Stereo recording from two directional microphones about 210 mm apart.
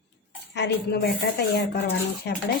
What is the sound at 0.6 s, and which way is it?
A woman's voice, 55° left (ahead or behind).